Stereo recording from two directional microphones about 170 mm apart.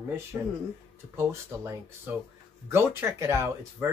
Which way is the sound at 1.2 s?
15° right (ahead or behind).